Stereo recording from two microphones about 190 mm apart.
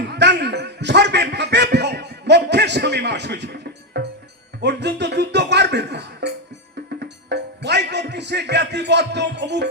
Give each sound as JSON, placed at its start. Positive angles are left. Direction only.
{"t": 0.0, "sound": "a sound", "side_deg": -65}
{"t": 4.6, "sound": "speech", "side_deg": -65}
{"t": 7.0, "sound": "music", "side_deg": -65}